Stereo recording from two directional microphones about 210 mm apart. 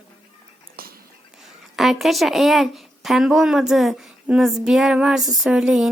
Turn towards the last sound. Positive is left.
turn(degrees=-5)  # may be behind; listen again after turning